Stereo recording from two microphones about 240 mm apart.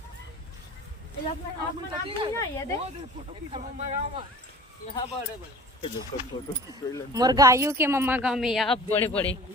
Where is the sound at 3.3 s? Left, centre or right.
Right.